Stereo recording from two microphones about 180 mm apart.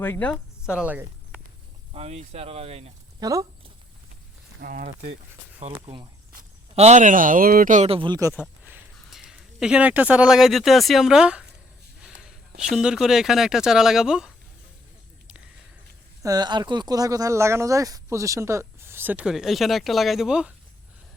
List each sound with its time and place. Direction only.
0.0 s speech: 10° left (ahead or behind)
0.6 s a sound: 5° right (ahead or behind)
1.9 s speech: 35° right (ahead or behind)
3.2 s speech: 20° right (ahead or behind)
4.6 s speech: 45° right (ahead or behind)
5.8 s speech: 30° right (ahead or behind)
6.7 s speech: 40° right (ahead or behind)
7.9 s speech: 30° right (ahead or behind)
8.6 s speech: 5° right (ahead or behind)
12.0 s a sound: 5° right (ahead or behind)
12.7 s speech: 5° right (ahead or behind)
16.2 s speech: 20° right (ahead or behind); by 20.5 s 5° right (ahead or behind)